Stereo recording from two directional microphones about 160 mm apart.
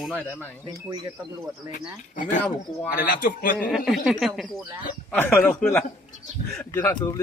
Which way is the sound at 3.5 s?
Centre (ahead or behind).